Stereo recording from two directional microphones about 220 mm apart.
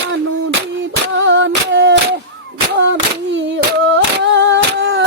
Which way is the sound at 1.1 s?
55° right (ahead or behind).